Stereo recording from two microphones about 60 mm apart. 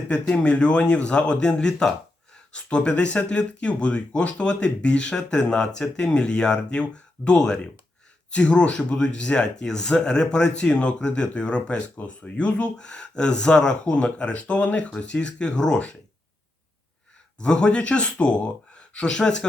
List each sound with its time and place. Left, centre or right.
0.1 s speech: centre
17.4 s speech: centre